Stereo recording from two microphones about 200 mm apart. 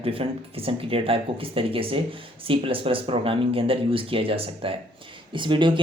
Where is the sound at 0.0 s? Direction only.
30° right (ahead or behind).